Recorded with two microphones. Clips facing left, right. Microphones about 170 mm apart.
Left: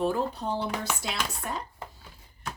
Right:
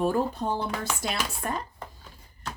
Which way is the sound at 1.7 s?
5° left (ahead or behind).